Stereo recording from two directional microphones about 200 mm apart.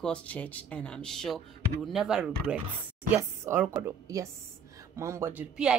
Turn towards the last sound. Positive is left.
turn(degrees=-5)  # may be behind; listen again after turning